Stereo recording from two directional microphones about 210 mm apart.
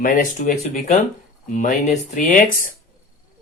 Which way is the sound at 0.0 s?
40° left (ahead or behind).